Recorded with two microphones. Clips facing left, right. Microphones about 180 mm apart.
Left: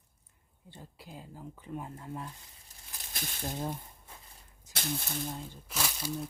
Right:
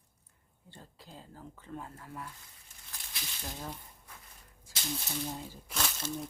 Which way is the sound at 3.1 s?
50° left (ahead or behind).